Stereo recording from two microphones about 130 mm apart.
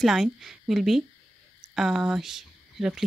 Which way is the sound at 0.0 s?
Centre (ahead or behind).